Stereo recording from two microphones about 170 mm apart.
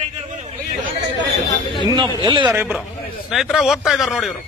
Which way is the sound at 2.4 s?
10° right (ahead or behind).